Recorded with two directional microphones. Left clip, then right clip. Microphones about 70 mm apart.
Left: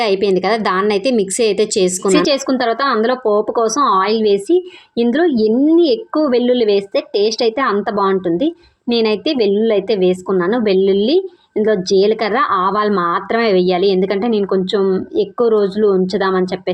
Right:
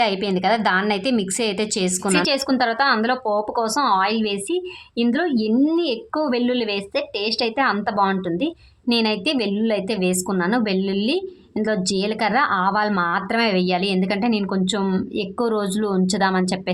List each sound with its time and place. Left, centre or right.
0.0 s speech: left
2.0 s a woman's voice: left